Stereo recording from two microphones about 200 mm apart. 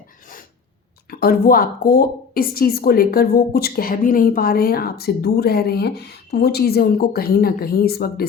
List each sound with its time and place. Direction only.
1.1 s a woman's voice: 50° left (ahead or behind)